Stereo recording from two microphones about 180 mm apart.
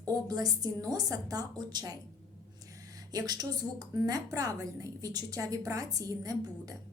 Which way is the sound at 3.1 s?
20° right (ahead or behind).